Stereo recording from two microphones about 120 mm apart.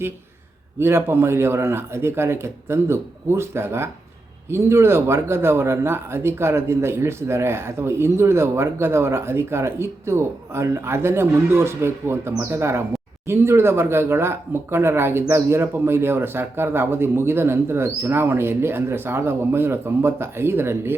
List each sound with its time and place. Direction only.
0.8 s speech: 20° right (ahead or behind)